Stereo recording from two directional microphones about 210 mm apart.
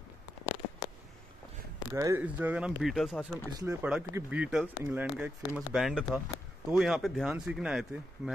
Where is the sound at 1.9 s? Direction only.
10° right (ahead or behind).